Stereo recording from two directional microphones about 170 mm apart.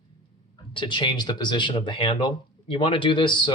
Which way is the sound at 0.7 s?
30° left (ahead or behind).